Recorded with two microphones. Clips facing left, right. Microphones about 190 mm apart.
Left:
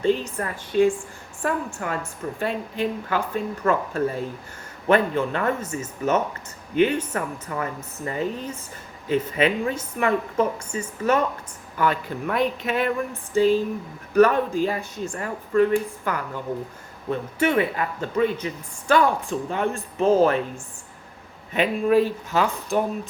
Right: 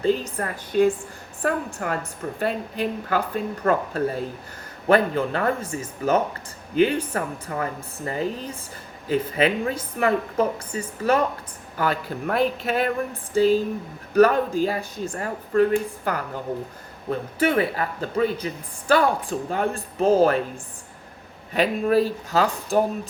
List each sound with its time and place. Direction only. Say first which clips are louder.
0.0 s speech: even; 40° right (ahead or behind)
21.5 s speech: left 1 dB; 40° right (ahead or behind)